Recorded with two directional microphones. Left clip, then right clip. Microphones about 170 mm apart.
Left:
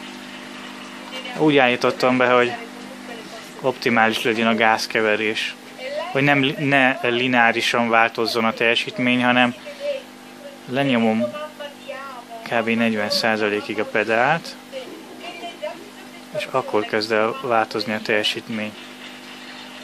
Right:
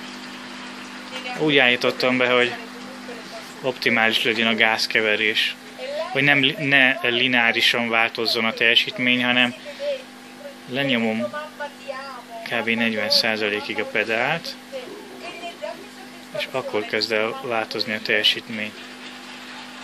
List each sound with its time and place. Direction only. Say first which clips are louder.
1.4 s speech: left 1 dB; 20° left (ahead or behind)
3.6 s speech: left 2 dB; 15° left (ahead or behind)
10.7 s speech: left 3 dB; 20° left (ahead or behind)
12.4 s speech: left 2 dB; 20° left (ahead or behind)
16.3 s speech: left 3 dB; 20° left (ahead or behind)